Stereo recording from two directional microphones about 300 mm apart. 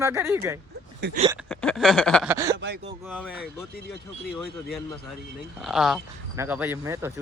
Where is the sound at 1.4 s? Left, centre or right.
Centre.